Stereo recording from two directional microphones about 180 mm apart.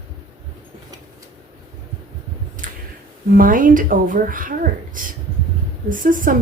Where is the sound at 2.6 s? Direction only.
45° right (ahead or behind).